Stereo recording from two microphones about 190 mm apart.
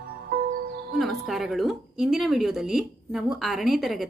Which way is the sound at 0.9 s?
Centre (ahead or behind).